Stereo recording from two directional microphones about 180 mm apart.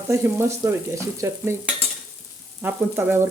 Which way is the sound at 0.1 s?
15° right (ahead or behind).